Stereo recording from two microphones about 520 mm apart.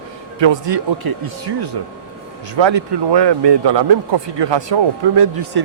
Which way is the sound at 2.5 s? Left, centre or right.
Right.